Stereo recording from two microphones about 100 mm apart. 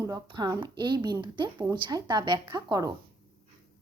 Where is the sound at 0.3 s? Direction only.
45° right (ahead or behind).